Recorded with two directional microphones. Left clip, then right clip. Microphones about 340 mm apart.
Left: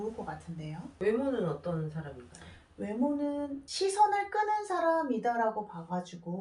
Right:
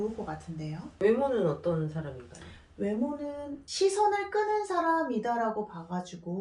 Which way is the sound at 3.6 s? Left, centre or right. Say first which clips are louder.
Right 1 dB; centre.